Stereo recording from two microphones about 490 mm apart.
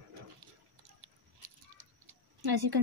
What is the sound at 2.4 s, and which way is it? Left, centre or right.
Speech, right.